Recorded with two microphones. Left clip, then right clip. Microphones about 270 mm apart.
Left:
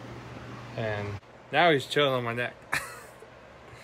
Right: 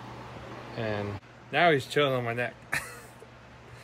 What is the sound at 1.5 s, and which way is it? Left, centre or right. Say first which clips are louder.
Speech: left 1 dB; centre.